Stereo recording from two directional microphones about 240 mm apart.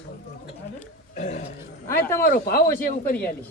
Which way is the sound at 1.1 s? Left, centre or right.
Left.